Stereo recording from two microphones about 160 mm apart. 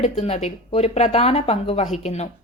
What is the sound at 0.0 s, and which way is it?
A woman's voice, 45° left (ahead or behind).